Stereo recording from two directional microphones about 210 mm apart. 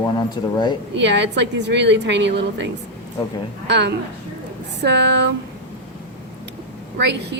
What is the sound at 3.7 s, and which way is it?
A woman's voice, 55° right (ahead or behind).